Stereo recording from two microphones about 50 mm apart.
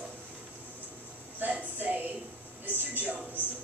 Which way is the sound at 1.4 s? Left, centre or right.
Right.